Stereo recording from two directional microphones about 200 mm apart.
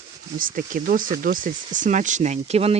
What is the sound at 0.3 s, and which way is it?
Speech, 45° right (ahead or behind).